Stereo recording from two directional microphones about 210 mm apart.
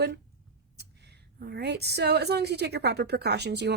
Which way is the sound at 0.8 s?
50° right (ahead or behind).